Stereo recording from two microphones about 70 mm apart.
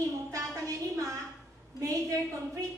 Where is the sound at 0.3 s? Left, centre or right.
Right.